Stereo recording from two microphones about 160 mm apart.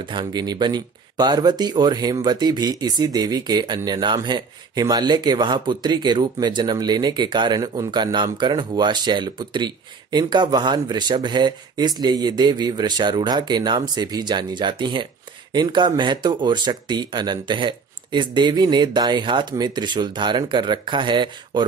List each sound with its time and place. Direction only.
0.0 s speech: 30° right (ahead or behind)